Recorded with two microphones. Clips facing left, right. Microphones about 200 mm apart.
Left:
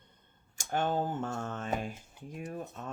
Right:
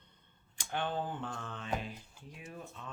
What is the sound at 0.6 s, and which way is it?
Speech, 45° left (ahead or behind).